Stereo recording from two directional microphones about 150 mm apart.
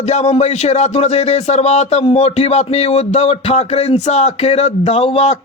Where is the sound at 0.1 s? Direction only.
50° left (ahead or behind).